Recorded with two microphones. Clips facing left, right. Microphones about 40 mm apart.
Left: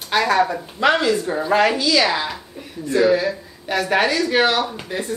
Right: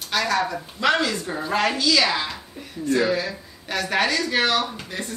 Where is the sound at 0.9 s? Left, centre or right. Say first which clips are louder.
Left 5 dB; centre.